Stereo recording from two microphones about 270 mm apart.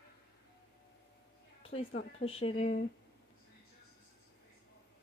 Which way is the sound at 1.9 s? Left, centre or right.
Left.